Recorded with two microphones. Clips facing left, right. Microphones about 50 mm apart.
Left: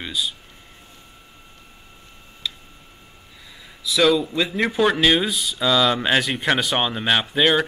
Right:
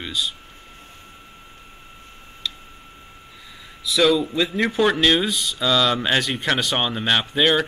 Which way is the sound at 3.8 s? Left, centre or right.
Centre.